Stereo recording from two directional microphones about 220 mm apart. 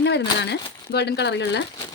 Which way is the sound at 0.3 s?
50° left (ahead or behind).